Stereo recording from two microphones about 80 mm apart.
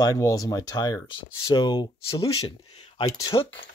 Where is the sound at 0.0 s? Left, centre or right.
Left.